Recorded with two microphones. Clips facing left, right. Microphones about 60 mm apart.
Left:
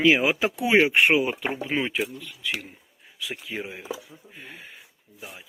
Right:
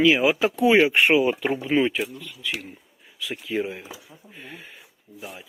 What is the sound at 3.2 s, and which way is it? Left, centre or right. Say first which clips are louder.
Speech: right 2 dB; left.